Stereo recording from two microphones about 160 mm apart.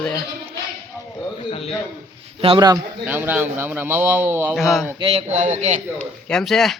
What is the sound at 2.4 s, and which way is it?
Speech, 30° right (ahead or behind).